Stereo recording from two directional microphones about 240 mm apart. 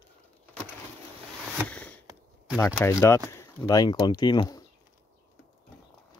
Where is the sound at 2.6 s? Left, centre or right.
Centre.